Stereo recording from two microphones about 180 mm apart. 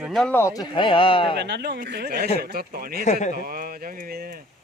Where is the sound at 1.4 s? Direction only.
65° right (ahead or behind).